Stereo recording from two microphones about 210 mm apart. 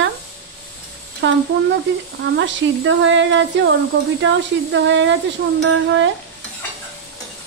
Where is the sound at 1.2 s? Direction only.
60° right (ahead or behind).